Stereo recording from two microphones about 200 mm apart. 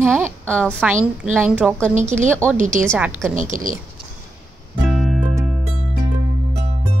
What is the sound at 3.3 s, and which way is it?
Speech, 40° right (ahead or behind).